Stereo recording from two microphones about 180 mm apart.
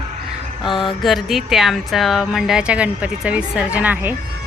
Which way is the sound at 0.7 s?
30° left (ahead or behind).